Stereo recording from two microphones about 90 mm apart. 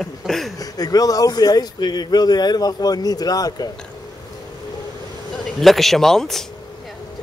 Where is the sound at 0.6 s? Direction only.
45° left (ahead or behind).